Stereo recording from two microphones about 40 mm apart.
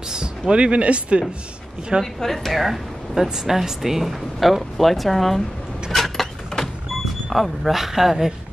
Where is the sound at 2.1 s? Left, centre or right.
Centre.